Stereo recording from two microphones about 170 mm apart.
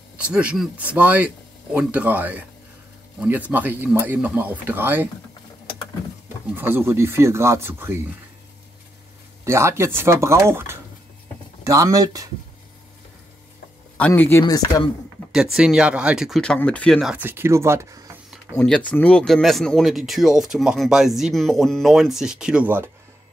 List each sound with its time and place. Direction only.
0.2 s speech: 5° right (ahead or behind)
6.5 s speech: 10° right (ahead or behind)
9.4 s speech: 15° right (ahead or behind)
13.9 s speech: 10° left (ahead or behind)
14.4 s speech: 25° left (ahead or behind)
15.3 s speech: 5° right (ahead or behind)
18.5 s speech: 10° left (ahead or behind); by 22.8 s 10° right (ahead or behind)